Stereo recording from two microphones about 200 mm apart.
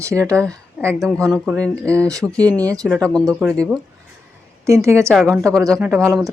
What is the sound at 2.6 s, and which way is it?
Speech, 15° right (ahead or behind).